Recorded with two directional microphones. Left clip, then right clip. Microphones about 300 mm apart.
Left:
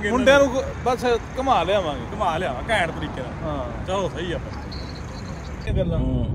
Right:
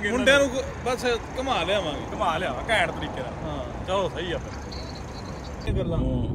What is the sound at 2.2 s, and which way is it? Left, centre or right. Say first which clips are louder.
Speech: left 2 dB; centre.